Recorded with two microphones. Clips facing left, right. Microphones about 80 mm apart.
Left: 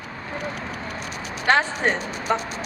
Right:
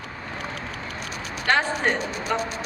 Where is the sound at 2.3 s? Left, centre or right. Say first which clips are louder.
Left 2 dB; left.